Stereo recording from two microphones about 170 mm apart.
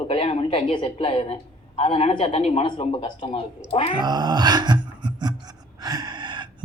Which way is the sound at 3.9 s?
25° right (ahead or behind).